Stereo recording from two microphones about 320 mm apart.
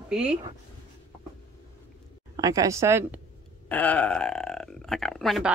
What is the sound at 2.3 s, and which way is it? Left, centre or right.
Speech, centre.